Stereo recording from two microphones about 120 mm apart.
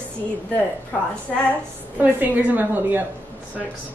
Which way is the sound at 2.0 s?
10° right (ahead or behind).